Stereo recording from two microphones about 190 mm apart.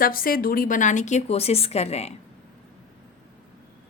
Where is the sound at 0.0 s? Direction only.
50° left (ahead or behind); by 2.1 s 35° left (ahead or behind).